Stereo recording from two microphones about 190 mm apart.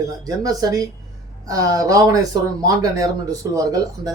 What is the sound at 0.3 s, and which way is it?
Speech, 20° right (ahead or behind).